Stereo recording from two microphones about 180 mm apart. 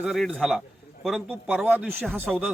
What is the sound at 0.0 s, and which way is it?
Speech, 5° right (ahead or behind).